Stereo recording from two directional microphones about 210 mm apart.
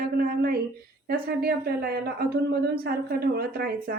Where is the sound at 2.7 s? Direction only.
50° right (ahead or behind).